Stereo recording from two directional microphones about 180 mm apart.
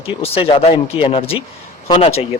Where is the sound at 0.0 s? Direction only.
30° left (ahead or behind).